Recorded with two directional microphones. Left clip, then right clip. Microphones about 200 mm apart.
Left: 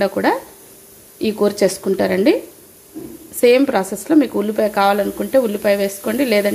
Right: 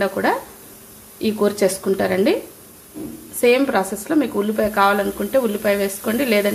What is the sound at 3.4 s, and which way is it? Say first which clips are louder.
Speech: left 3 dB; 25° left (ahead or behind).